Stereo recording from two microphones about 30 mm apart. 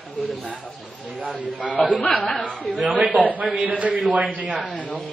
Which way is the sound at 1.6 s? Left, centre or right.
Left.